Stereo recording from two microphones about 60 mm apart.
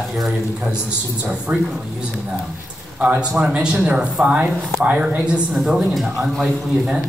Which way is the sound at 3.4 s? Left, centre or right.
Centre.